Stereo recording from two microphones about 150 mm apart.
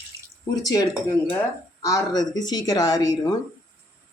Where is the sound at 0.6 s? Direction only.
25° left (ahead or behind).